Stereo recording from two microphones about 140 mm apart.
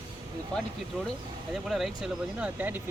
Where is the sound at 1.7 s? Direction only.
5° right (ahead or behind).